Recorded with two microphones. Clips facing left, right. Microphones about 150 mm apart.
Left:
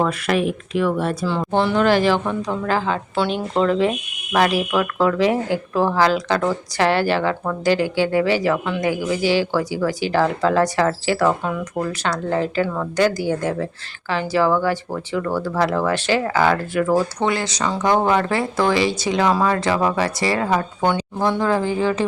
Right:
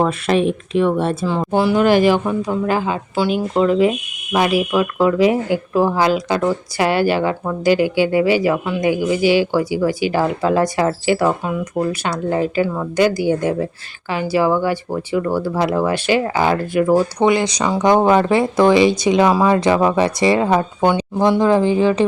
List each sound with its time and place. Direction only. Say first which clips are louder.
0.0 s speech: right 3 dB; 25° right (ahead or behind)
1.5 s speech: right 3 dB; 10° right (ahead or behind)